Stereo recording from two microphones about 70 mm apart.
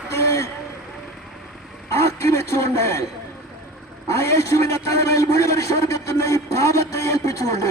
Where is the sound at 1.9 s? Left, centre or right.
Left.